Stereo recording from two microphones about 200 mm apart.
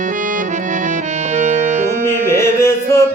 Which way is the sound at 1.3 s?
35° right (ahead or behind).